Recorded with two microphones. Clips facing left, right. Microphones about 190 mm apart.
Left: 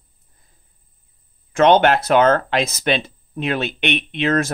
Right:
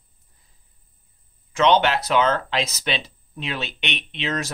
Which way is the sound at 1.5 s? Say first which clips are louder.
Left 5 dB; 50° left (ahead or behind).